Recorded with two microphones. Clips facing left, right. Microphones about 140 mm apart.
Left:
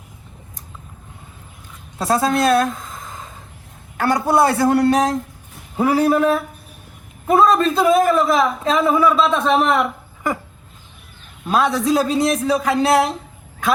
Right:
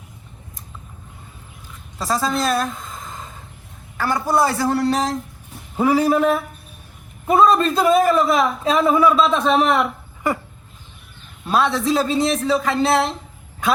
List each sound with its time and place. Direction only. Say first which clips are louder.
2.0 s a man's voice: left 4 dB; 55° left (ahead or behind)
2.2 s a man's voice: left 4 dB; centre (ahead or behind)
2.6 s a sound: left 3 dB; centre (ahead or behind)
4.3 s a man's voice: left 3 dB; 55° left (ahead or behind)
5.7 s a man's voice: left 1 dB; centre (ahead or behind)
11.4 s a man's voice: left 1 dB; centre (ahead or behind)